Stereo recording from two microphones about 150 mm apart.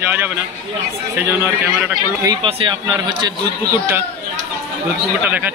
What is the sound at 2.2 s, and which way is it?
Speech, 30° right (ahead or behind).